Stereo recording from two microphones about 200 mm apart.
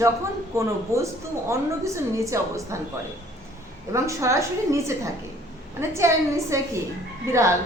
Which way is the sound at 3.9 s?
15° right (ahead or behind).